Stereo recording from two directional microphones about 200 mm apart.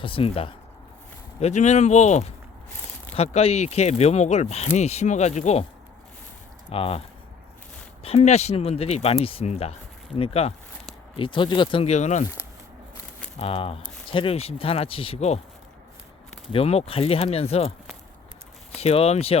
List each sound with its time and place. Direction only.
0.0 s speech: 25° left (ahead or behind)
6.7 s speech: 30° left (ahead or behind)
8.0 s speech: 30° left (ahead or behind)
13.4 s speech: 30° left (ahead or behind)
16.5 s speech: 30° left (ahead or behind)
18.8 s speech: 30° left (ahead or behind)